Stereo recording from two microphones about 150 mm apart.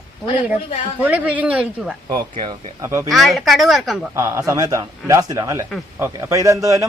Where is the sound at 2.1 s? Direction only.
25° right (ahead or behind).